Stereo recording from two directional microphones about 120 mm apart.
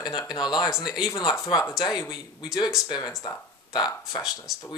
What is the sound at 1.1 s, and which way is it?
Speech, 40° left (ahead or behind).